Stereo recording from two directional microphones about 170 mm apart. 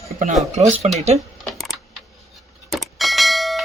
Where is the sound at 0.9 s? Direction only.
40° right (ahead or behind).